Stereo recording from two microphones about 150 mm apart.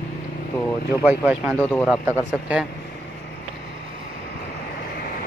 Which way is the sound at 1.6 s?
10° left (ahead or behind).